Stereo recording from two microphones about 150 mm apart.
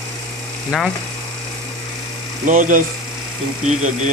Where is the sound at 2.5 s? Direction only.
60° right (ahead or behind).